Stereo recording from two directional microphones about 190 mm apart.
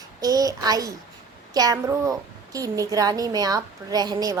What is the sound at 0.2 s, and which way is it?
A woman's voice, 20° right (ahead or behind).